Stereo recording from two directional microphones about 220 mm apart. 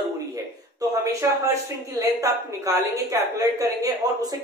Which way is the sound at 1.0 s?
15° right (ahead or behind).